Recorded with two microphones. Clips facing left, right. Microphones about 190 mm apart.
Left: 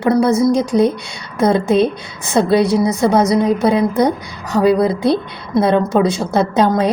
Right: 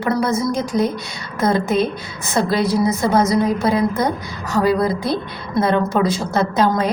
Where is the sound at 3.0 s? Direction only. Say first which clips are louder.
Left 3 dB; 25° left (ahead or behind).